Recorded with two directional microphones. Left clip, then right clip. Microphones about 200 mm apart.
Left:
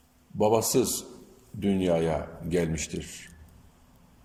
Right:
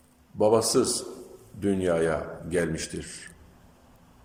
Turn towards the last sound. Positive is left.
turn(degrees=15)  # may be behind; listen again after turning